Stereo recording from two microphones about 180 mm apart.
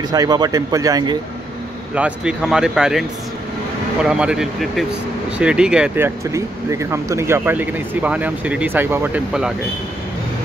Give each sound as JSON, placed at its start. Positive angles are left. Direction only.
{"t": 0.1, "sound": "speech", "side_deg": -20}
{"t": 2.0, "sound": "speech", "side_deg": -5}